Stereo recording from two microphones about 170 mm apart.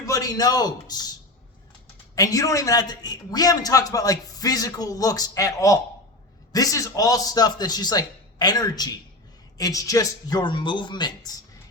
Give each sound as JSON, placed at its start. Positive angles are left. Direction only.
{"t": 0.0, "sound": "a man's voice", "side_deg": 20}
{"t": 2.1, "sound": "a man's voice", "side_deg": 20}